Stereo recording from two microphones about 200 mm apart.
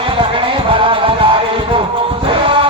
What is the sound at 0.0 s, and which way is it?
Music, 25° right (ahead or behind).